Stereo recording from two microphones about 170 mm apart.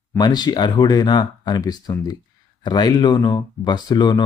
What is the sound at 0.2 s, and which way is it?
Speech, 25° left (ahead or behind).